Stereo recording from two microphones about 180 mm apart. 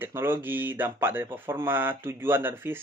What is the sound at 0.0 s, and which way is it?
Speech, 10° right (ahead or behind).